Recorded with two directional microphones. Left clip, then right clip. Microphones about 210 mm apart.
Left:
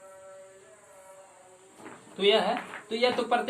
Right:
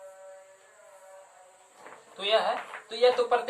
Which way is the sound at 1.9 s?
Centre (ahead or behind).